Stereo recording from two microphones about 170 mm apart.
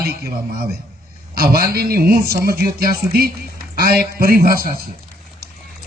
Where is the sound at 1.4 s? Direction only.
60° right (ahead or behind).